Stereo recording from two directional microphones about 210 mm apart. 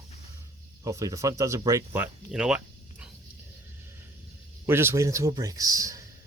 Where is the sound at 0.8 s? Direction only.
15° right (ahead or behind).